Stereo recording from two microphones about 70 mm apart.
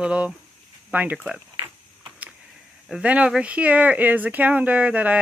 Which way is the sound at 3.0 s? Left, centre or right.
Centre.